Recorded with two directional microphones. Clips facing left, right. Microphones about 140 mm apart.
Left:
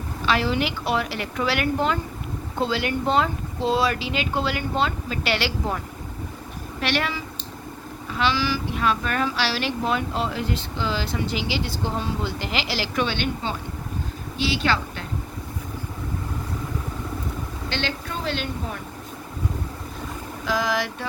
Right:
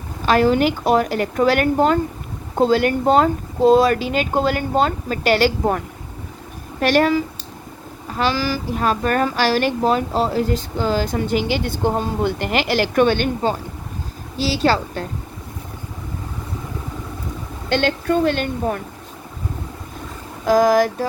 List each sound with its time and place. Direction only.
0.3 s speech: 45° right (ahead or behind)
17.7 s speech: 50° right (ahead or behind)
20.4 s speech: 45° right (ahead or behind)